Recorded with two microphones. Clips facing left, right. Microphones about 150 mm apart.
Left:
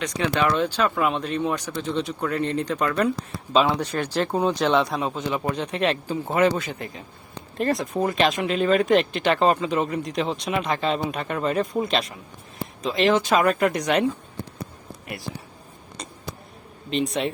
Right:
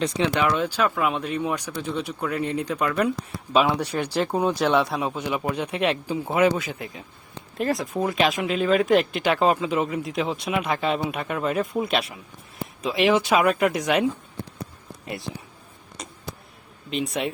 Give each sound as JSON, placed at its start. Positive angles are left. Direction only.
{"t": 0.3, "sound": "speech", "side_deg": -10}
{"t": 15.0, "sound": "speech", "side_deg": -25}
{"t": 16.9, "sound": "speech", "side_deg": -5}